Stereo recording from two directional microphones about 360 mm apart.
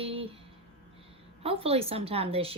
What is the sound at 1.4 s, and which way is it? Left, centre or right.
A woman's voice, centre.